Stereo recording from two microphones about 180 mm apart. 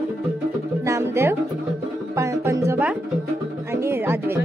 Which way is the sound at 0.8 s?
15° right (ahead or behind).